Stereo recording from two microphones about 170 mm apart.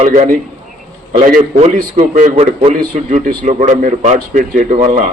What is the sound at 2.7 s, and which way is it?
A man's voice, 50° right (ahead or behind).